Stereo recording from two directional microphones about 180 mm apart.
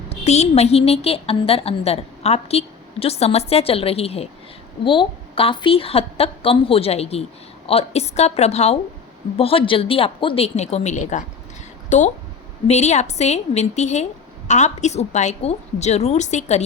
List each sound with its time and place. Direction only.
0.1 s a woman's voice: 35° left (ahead or behind)